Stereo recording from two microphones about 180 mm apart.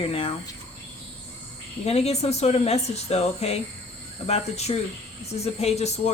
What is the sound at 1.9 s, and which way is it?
Speech, 35° left (ahead or behind).